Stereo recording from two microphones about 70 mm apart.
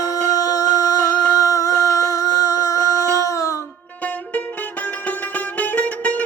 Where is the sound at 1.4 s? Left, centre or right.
Left.